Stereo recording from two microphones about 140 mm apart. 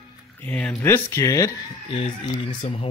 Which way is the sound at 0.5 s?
15° left (ahead or behind).